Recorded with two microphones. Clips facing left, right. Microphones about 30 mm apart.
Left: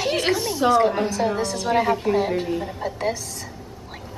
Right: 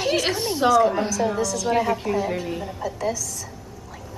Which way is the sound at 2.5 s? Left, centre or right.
Centre.